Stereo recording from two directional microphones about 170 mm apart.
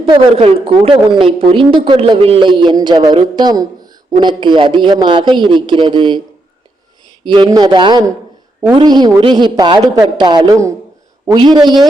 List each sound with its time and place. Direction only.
0.0 s a woman's voice: 30° right (ahead or behind)
7.3 s a woman's voice: 25° right (ahead or behind)